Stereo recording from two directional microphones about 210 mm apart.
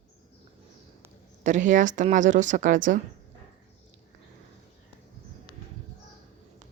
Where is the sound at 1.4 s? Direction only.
35° right (ahead or behind).